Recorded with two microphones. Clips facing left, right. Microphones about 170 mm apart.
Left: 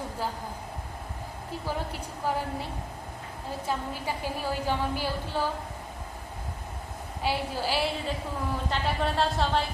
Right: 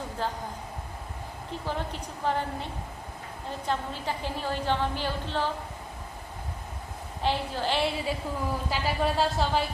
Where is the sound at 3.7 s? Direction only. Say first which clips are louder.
Right 1 dB; 10° left (ahead or behind).